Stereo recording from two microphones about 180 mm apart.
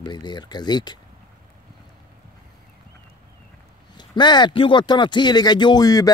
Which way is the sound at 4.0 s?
25° left (ahead or behind).